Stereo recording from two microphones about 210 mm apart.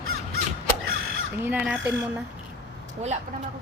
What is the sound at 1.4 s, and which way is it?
Speech, 5° right (ahead or behind).